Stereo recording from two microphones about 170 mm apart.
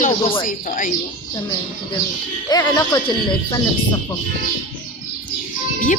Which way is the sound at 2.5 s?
20° left (ahead or behind).